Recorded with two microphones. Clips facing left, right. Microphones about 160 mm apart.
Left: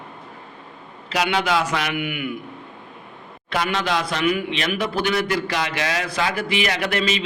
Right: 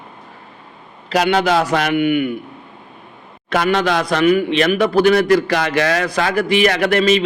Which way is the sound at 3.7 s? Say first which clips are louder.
Right 6 dB; 50° right (ahead or behind).